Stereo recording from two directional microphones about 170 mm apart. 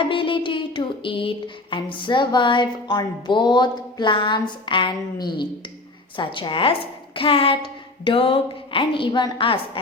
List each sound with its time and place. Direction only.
0.0 s music: 30° left (ahead or behind)
6.1 s speech: 30° left (ahead or behind)